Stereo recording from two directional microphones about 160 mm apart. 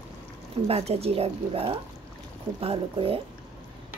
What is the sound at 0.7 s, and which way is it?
Speech, 40° right (ahead or behind).